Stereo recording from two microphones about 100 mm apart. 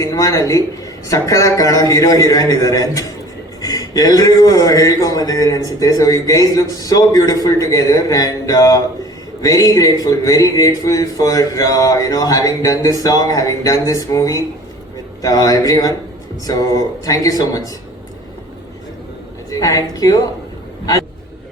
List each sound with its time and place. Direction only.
0.0 s a man's voice: 35° left (ahead or behind)
19.5 s speech: 35° left (ahead or behind)